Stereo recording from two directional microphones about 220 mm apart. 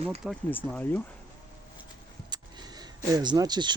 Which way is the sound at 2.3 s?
20° right (ahead or behind).